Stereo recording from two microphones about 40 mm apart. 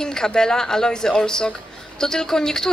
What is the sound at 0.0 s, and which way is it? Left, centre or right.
A woman's voice, centre.